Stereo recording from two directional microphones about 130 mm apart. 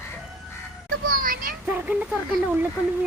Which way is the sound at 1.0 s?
90° right.